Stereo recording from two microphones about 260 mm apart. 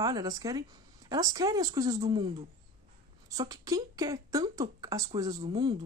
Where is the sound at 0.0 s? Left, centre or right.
Centre.